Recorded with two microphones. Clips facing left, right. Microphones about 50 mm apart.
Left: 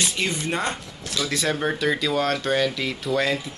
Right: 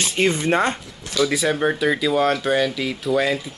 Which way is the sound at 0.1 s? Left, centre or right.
Right.